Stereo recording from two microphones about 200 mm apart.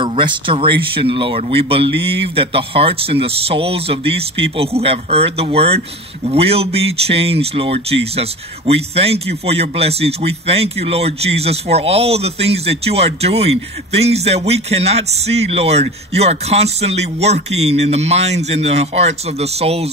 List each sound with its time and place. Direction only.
0.0 s speech: 25° right (ahead or behind)